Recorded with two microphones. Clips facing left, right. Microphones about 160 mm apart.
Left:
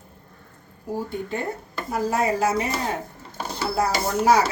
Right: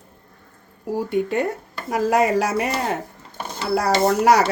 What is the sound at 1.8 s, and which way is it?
Speech, 85° right.